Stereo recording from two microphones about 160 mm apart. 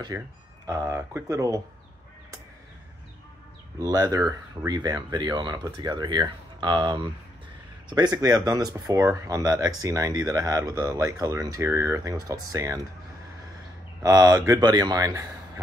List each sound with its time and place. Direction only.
0.1 s speech: 15° right (ahead or behind)
3.8 s speech: 20° right (ahead or behind)
14.0 s speech: 20° right (ahead or behind)